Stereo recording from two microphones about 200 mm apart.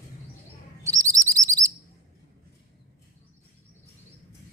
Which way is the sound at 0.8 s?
15° right (ahead or behind).